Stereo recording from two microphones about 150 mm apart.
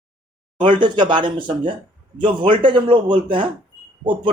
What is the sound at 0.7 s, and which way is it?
A man's voice, 30° right (ahead or behind).